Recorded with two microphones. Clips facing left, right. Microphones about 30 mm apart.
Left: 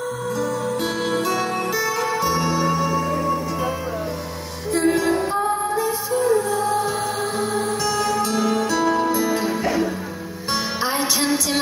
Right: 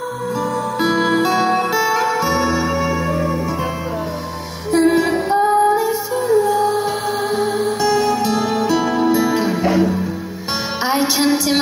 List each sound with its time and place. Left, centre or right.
0.7 s music: right
4.7 s music: centre
5.8 s music: centre
6.6 s music: right